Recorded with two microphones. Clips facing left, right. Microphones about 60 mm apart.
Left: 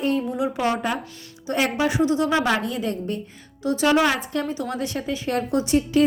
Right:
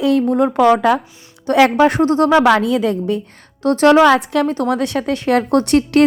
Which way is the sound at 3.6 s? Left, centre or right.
Right.